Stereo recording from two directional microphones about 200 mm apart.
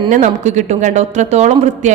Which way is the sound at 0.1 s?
35° right (ahead or behind).